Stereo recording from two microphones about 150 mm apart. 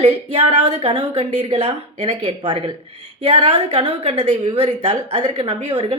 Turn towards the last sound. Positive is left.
turn(degrees=-40)  # may be behind; listen again after turning